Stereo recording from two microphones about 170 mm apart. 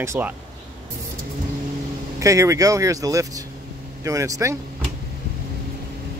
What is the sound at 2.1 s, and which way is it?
Speech, 20° right (ahead or behind).